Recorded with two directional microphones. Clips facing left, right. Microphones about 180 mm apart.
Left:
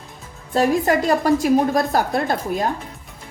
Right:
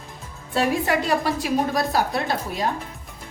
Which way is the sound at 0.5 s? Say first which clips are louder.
Left 4 dB; 45° left (ahead or behind).